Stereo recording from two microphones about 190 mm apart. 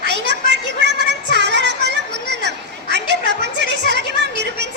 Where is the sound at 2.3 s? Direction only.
65° right (ahead or behind).